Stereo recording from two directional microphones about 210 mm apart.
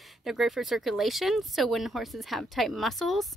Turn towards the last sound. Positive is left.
turn(degrees=0)  # may be behind; listen again after turning